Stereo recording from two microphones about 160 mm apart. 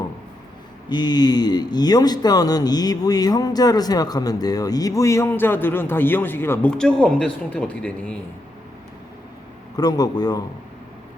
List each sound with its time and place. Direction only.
0.9 s speech: 25° left (ahead or behind); by 8.2 s 5° left (ahead or behind)
9.7 s speech: 25° left (ahead or behind)